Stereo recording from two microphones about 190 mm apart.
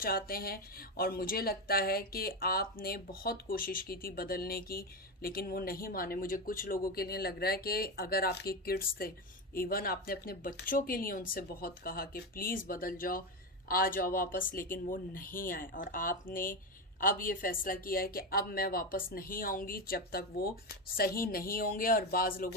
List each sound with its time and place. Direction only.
0.0 s speech: 50° left (ahead or behind)